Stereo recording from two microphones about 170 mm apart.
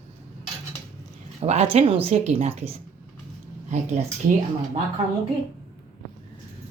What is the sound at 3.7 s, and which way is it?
Speech, 45° right (ahead or behind).